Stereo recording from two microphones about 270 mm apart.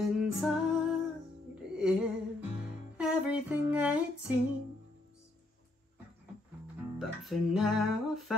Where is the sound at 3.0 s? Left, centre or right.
Centre.